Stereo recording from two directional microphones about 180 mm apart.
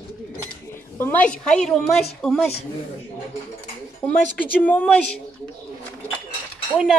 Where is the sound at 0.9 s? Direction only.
10° left (ahead or behind).